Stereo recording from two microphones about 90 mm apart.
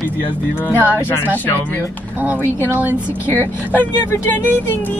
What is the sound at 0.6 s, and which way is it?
Speech, 20° left (ahead or behind).